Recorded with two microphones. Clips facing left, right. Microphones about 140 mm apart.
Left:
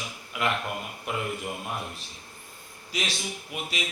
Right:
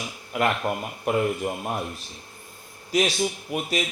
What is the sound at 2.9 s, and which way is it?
Speech, 45° right (ahead or behind).